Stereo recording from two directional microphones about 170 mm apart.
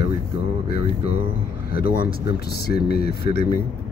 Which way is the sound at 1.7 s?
65° left (ahead or behind).